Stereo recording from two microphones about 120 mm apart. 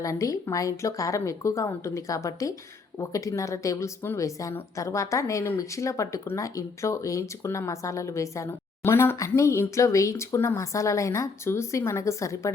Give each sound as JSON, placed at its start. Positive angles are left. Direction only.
{"t": 0.0, "sound": "speech", "side_deg": 25}